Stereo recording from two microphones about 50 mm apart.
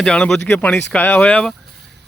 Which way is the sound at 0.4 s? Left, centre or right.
Left.